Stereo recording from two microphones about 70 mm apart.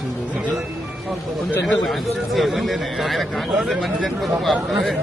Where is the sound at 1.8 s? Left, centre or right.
Centre.